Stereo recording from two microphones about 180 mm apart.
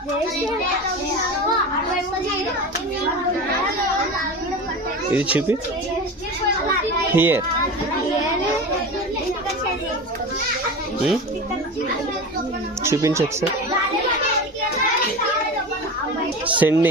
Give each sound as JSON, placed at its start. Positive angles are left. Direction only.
{"t": 5.1, "sound": "speech", "side_deg": -10}
{"t": 7.1, "sound": "speech", "side_deg": -10}
{"t": 12.8, "sound": "speech", "side_deg": -15}
{"t": 16.6, "sound": "speech", "side_deg": -10}